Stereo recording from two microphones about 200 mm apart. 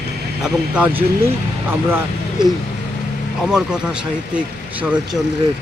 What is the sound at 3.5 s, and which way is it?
Speech, 5° right (ahead or behind).